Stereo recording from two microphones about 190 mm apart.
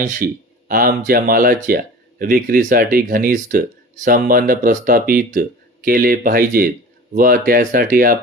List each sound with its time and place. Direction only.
0.0 s speech: 45° right (ahead or behind)